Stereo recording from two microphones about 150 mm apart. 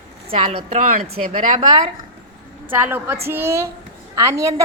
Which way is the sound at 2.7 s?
15° right (ahead or behind).